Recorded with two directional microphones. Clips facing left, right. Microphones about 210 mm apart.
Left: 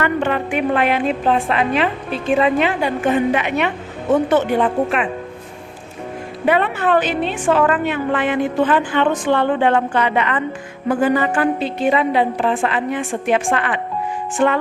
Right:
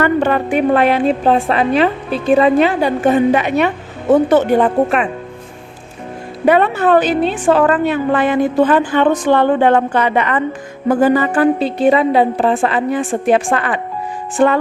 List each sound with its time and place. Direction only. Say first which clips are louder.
0.0 s a woman's voice: right 5 dB; 40° right (ahead or behind)
6.4 s a woman's voice: right 5 dB; 40° right (ahead or behind)